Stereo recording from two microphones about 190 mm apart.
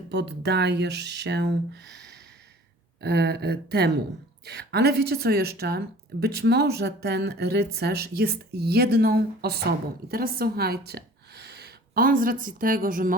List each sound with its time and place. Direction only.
0.1 s a woman's voice: 65° right (ahead or behind); by 13.1 s 45° right (ahead or behind)